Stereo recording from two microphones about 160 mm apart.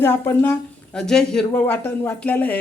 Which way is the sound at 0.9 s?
5° left (ahead or behind).